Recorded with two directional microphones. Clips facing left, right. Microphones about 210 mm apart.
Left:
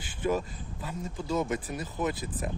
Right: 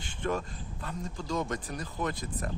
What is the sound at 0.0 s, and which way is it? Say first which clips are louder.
Speech: left 3 dB; 5° left (ahead or behind).